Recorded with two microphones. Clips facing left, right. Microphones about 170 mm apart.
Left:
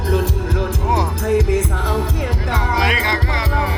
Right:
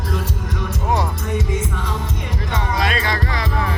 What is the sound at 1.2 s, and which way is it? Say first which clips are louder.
Music: left 7 dB; 90° left.